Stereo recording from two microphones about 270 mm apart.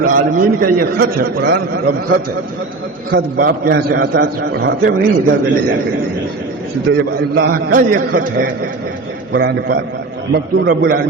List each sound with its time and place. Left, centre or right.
0.0 s a man's voice: right
6.9 s a man's voice: right